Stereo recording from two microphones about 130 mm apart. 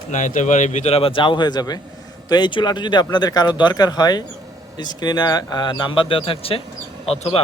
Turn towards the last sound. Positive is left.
turn(degrees=45)  # may be behind; listen again after turning